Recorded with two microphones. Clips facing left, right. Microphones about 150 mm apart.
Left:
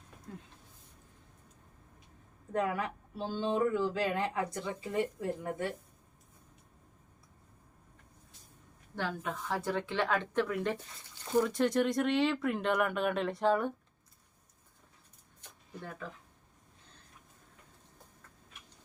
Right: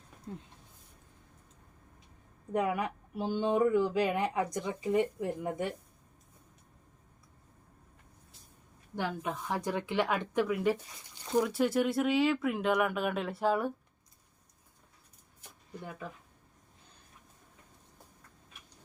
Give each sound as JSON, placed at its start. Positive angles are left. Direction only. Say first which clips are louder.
{"t": 2.5, "sound": "speech", "louder": "right 2 dB", "side_deg": -15}
{"t": 9.0, "sound": "a woman's voice", "louder": "right 2 dB", "side_deg": -15}